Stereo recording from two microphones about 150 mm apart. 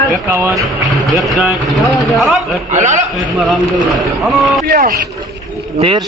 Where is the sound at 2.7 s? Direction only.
55° right (ahead or behind).